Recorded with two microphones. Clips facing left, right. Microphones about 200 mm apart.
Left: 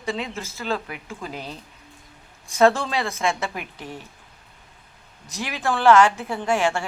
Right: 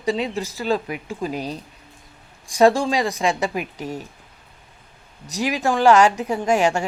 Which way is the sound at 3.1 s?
35° right (ahead or behind).